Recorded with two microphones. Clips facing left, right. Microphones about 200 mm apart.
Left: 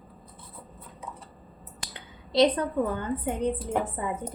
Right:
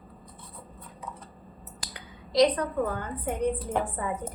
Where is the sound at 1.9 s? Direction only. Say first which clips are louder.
Even; 25° left (ahead or behind).